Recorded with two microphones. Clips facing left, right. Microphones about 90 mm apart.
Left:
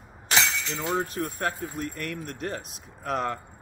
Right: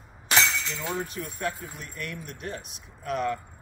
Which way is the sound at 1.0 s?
45° left (ahead or behind).